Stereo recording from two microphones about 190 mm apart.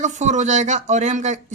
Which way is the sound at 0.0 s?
40° right (ahead or behind).